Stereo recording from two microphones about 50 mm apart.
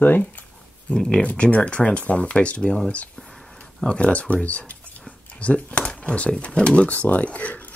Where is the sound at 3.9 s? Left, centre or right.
Left.